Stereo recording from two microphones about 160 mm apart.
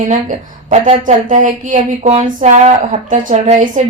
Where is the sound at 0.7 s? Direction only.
50° right (ahead or behind).